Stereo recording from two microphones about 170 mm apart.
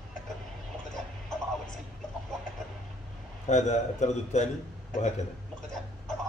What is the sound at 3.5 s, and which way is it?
Speech, 45° left (ahead or behind).